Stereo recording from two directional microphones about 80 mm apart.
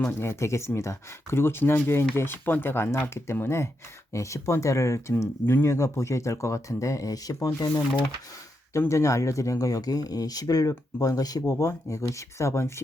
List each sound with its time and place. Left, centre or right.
0.2 s speech: left
8.9 s speech: left